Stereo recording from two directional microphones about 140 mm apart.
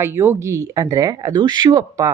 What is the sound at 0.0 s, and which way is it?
Speech, 20° right (ahead or behind).